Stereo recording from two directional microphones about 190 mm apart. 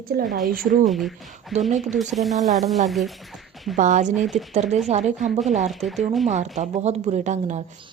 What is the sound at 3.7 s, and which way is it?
Speech, 40° right (ahead or behind).